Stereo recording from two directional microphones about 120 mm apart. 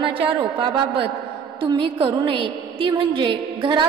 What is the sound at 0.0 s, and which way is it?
A woman's voice, 45° right (ahead or behind).